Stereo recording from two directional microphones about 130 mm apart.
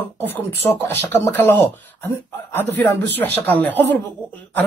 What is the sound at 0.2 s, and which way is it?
Speech, 15° left (ahead or behind).